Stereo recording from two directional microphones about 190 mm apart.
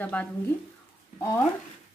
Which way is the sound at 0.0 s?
5° left (ahead or behind).